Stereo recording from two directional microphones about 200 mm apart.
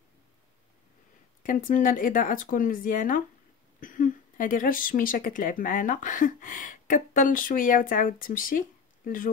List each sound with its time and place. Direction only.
1.4 s speech: 40° left (ahead or behind)